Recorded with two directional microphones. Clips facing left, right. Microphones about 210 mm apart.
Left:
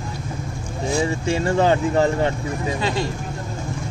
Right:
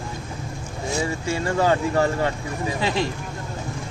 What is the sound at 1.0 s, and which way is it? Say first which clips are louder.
Speech: left 3 dB; 25° left (ahead or behind).